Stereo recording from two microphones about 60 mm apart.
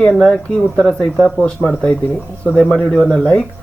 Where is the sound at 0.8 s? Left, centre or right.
Centre.